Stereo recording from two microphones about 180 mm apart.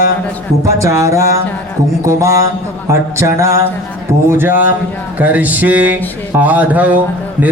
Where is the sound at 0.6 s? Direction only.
15° right (ahead or behind).